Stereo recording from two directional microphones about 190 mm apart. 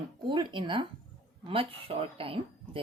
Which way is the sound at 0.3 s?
25° right (ahead or behind).